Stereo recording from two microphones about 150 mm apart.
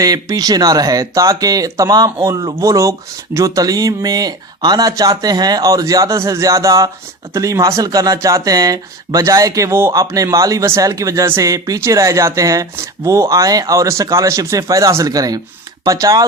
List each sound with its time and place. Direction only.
0.0 s speech: 25° right (ahead or behind)